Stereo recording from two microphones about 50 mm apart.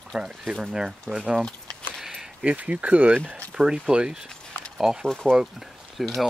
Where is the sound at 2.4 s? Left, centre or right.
Right.